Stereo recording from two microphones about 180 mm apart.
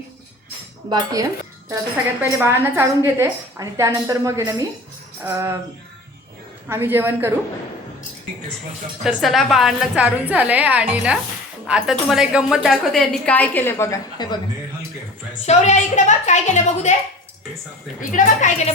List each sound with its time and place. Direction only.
0.9 s dishes: 20° right (ahead or behind)
2.5 s a woman's voice: 15° right (ahead or behind)
6.7 s a woman's voice: 10° right (ahead or behind)
9.0 s a woman's voice: centre (ahead or behind); by 14.3 s 20° left (ahead or behind)
15.4 s a woman's voice: 40° left (ahead or behind)
18.1 s a woman's voice: 45° left (ahead or behind)